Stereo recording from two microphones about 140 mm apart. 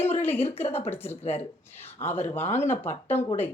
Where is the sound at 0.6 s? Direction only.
45° left (ahead or behind).